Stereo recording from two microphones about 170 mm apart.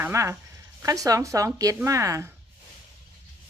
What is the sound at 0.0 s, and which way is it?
Speech, 15° right (ahead or behind).